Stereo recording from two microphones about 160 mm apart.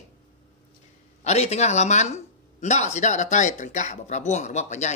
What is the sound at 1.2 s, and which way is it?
Speech, 45° left (ahead or behind).